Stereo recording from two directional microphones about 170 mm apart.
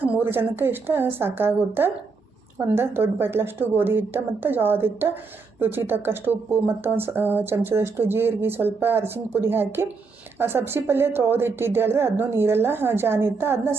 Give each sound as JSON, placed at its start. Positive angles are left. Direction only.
{"t": 0.0, "sound": "speech", "side_deg": -10}